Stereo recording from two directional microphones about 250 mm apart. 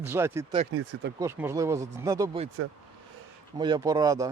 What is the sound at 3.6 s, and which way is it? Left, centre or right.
Speech, centre.